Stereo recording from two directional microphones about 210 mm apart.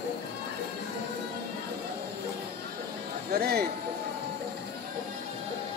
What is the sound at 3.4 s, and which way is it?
Speech, 50° right (ahead or behind).